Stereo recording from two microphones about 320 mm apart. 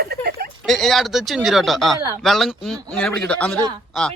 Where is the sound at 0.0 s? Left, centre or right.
Right.